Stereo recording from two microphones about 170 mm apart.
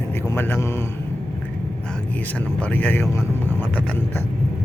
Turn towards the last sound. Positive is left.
turn(degrees=10)  # may be behind; listen again after turning